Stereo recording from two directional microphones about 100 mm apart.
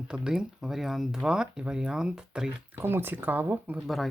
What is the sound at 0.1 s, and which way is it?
Speech, 5° right (ahead or behind).